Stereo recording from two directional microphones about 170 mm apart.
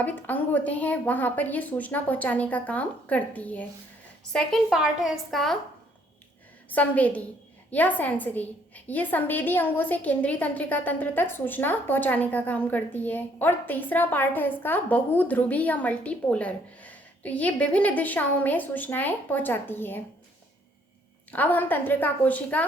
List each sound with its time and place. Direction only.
0.0 s a woman's voice: 10° left (ahead or behind)
6.7 s a woman's voice: 10° left (ahead or behind)
21.2 s a woman's voice: 10° left (ahead or behind)